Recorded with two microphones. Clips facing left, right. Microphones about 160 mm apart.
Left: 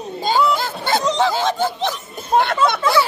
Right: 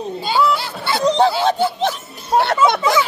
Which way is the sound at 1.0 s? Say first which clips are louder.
Right 6 dB; 35° right (ahead or behind).